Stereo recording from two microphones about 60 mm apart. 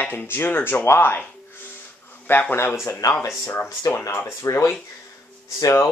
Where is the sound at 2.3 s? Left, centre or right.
Left.